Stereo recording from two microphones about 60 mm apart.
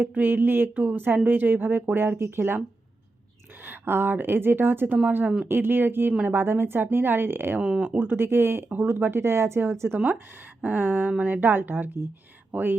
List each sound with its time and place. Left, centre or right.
0.0 s speech: right
0.8 s speech: right
3.6 s speech: right
7.6 s speech: centre
7.9 s speech: right
10.6 s speech: right